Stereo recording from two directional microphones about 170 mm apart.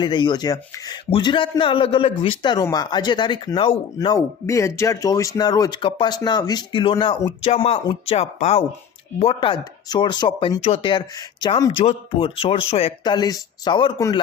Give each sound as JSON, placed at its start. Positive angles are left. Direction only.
{"t": 0.0, "sound": "speech", "side_deg": 25}
{"t": 4.4, "sound": "speech", "side_deg": 15}
{"t": 13.1, "sound": "speech", "side_deg": 25}